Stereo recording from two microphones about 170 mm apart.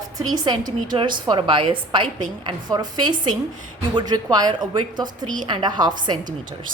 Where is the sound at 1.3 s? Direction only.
30° right (ahead or behind).